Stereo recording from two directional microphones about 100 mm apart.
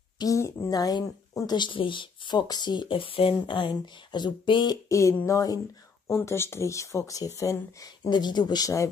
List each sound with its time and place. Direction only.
0.2 s speech: 35° left (ahead or behind)
4.8 s a sound: 30° left (ahead or behind)
6.0 s speech: 25° left (ahead or behind)
8.1 s speech: 45° left (ahead or behind)